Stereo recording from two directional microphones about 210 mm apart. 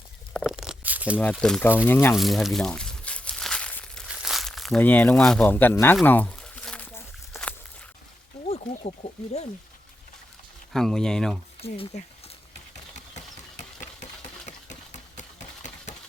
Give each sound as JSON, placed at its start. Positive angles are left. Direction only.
{"t": 0.3, "sound": "a sound", "side_deg": -5}
{"t": 1.2, "sound": "speech", "side_deg": 5}
{"t": 2.1, "sound": "a sound", "side_deg": 0}
{"t": 4.1, "sound": "crumpling", "side_deg": 0}
{"t": 8.4, "sound": "wild animals", "side_deg": 30}
{"t": 10.7, "sound": "speech", "side_deg": 0}
{"t": 11.6, "sound": "speech", "side_deg": 30}
{"t": 13.1, "sound": "engine", "side_deg": 35}